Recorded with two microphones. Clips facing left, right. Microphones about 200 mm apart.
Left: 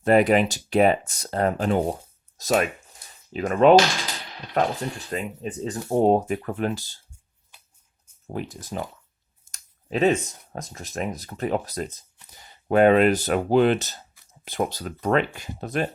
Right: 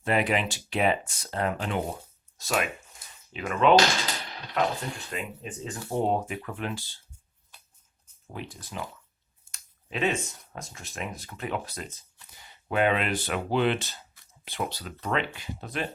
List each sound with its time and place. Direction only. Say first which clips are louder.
0.0 s speech: left 8 dB; 45° left (ahead or behind)
8.3 s speech: left 7 dB; 45° left (ahead or behind)